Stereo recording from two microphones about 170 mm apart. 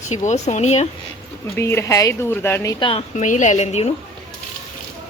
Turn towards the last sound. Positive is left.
turn(degrees=40)  # may be behind; listen again after turning